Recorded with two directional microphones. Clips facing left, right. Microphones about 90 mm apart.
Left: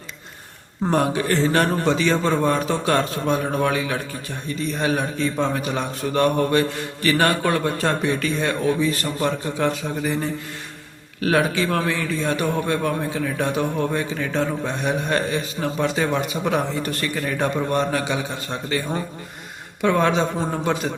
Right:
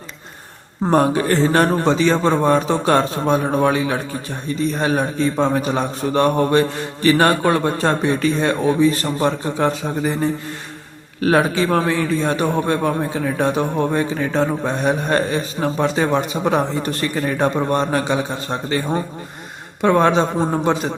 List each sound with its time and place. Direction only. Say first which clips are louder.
0.9 s a man's voice: right 5 dB; 40° right (ahead or behind)
11.2 s a man's voice: right 4 dB; 35° right (ahead or behind)